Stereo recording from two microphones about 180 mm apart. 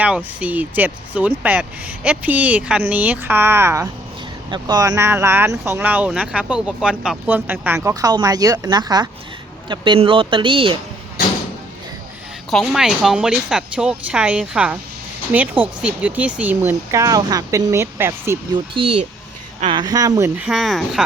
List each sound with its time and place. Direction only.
0.0 s speech: 5° right (ahead or behind); by 10.8 s 30° right (ahead or behind)
12.5 s speech: centre (ahead or behind)
18.7 s speech: 30° right (ahead or behind)
20.4 s speech: centre (ahead or behind)